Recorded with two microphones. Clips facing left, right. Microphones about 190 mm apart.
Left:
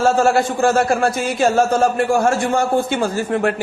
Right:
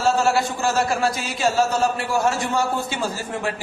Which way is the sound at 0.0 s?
50° left (ahead or behind).